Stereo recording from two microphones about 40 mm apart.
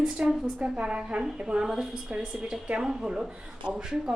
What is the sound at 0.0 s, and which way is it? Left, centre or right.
Speech, right.